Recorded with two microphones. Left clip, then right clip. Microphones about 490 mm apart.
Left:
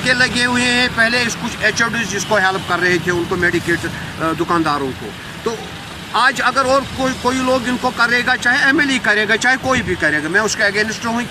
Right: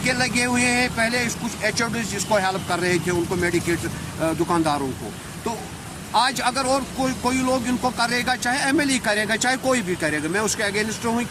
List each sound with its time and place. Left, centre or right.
0.0 s speech: right
6.1 s speech: right